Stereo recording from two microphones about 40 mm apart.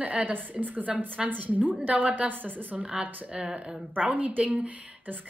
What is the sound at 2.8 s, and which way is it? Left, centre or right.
Speech, right.